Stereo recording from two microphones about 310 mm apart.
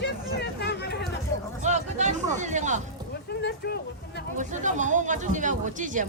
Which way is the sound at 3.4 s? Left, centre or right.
Left.